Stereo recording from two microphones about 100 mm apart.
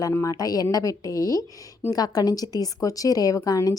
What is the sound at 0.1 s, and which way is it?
A woman's voice, 30° left (ahead or behind).